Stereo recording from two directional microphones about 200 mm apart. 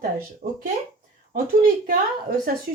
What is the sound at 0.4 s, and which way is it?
A woman's voice, 50° right (ahead or behind).